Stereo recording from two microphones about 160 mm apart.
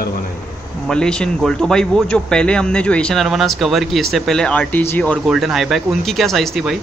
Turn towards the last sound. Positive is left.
turn(degrees=0)  # may be behind; listen again after turning